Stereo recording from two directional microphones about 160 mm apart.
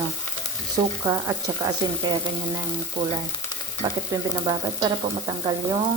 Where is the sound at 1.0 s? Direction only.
20° right (ahead or behind).